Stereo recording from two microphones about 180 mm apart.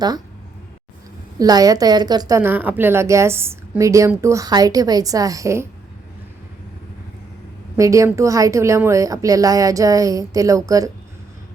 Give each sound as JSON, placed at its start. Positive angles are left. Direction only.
{"t": 1.4, "sound": "a woman's voice", "side_deg": -20}
{"t": 7.8, "sound": "a woman's voice", "side_deg": -15}